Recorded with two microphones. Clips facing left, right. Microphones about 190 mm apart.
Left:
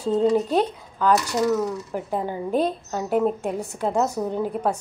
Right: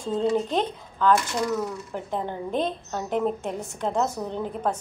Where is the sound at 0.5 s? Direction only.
10° left (ahead or behind).